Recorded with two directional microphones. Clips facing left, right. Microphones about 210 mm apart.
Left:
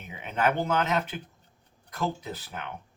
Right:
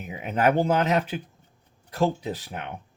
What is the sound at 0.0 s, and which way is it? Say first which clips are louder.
Speech: right 5 dB; 35° right (ahead or behind).